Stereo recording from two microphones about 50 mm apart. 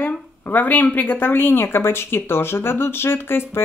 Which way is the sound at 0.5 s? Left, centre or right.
Left.